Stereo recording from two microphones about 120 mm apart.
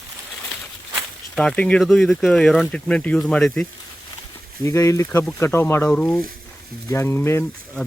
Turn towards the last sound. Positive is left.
turn(degrees=20)  # may be behind; listen again after turning